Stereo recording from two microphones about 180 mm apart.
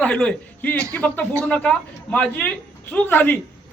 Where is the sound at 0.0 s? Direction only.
5° left (ahead or behind).